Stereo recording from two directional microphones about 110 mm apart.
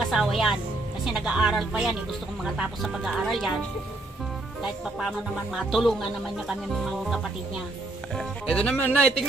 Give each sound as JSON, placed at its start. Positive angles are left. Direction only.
{"t": 0.1, "sound": "speech", "side_deg": -5}
{"t": 5.5, "sound": "speech", "side_deg": 0}